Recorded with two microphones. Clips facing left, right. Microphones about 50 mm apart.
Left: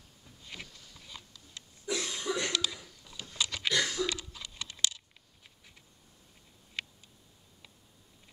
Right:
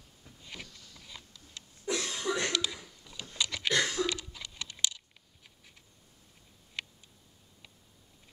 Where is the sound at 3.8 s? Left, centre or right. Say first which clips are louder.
Right 1 dB; centre.